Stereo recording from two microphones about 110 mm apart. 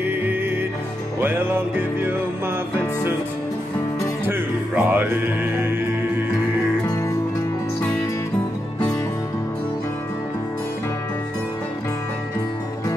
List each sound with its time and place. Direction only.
0.0 s music: 15° right (ahead or behind)
4.3 s music: 15° right (ahead or behind)
6.9 s music: 30° left (ahead or behind)